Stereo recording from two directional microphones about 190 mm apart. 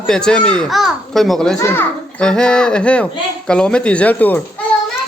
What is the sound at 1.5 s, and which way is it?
A child's voice, 10° left (ahead or behind).